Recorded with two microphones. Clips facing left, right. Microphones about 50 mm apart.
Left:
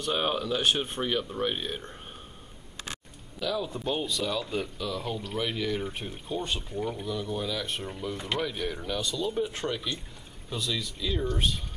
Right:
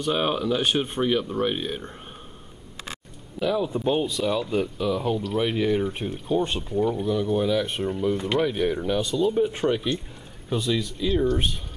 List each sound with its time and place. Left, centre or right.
0.0 s speech: centre
3.3 s speech: right
5.9 s speech: centre
6.3 s speech: right
6.7 s speech: centre
7.1 s speech: centre